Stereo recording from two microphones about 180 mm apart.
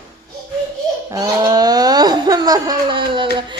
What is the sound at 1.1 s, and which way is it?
Laughter, 20° right (ahead or behind).